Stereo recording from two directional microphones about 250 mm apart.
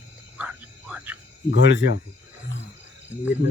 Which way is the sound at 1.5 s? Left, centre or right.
Left.